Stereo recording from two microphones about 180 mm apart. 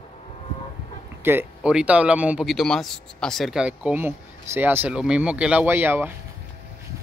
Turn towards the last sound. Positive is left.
turn(degrees=-10)  # may be behind; listen again after turning